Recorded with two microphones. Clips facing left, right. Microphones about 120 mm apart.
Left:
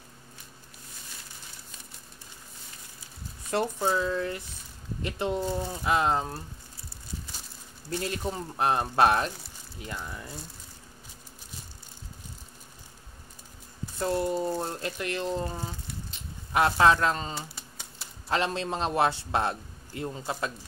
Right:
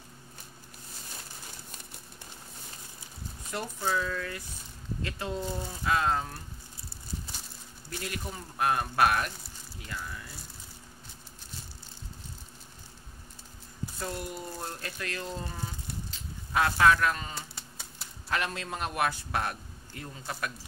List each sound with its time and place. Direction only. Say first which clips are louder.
3.5 s a man's voice: left 5 dB; 25° left (ahead or behind)
7.9 s a man's voice: left 7 dB; 30° left (ahead or behind)
13.9 s speech: left 11 dB; 30° left (ahead or behind)
17.4 s typewriter: left 3 dB; centre (ahead or behind)
18.3 s a man's voice: left 5 dB; 25° left (ahead or behind)